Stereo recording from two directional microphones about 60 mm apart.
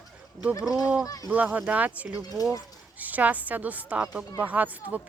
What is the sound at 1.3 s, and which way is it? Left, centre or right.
Speech, right.